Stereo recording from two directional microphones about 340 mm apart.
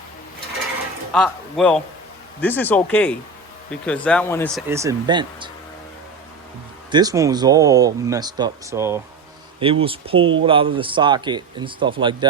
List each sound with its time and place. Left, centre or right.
1.1 s speech: centre
4.7 s speech: centre
6.9 s speech: centre
10.2 s speech: right
10.4 s speech: centre